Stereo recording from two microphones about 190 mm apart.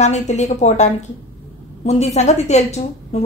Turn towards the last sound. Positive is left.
turn(degrees=35)  # may be behind; listen again after turning